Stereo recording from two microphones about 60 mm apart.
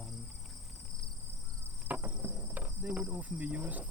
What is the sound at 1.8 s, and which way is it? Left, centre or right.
Insect, right.